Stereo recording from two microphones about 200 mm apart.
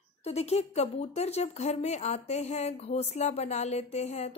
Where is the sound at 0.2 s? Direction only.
30° left (ahead or behind).